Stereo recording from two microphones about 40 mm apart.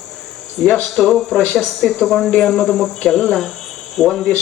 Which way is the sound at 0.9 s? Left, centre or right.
Centre.